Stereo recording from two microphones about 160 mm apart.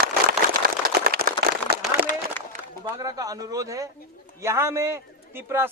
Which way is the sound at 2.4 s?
10° left (ahead or behind).